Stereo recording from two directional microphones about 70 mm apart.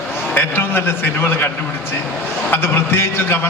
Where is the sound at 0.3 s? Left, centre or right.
Left.